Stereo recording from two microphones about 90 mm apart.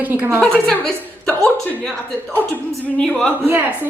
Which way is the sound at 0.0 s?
20° right (ahead or behind).